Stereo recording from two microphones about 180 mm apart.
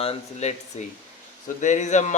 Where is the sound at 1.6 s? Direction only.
40° left (ahead or behind).